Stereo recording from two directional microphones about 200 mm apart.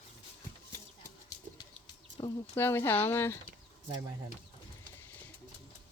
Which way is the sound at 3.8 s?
15° right (ahead or behind).